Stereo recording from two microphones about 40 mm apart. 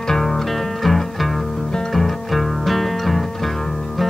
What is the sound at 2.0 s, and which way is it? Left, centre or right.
Music, centre.